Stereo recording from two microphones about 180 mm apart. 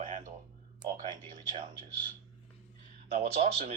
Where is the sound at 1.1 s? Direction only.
25° right (ahead or behind).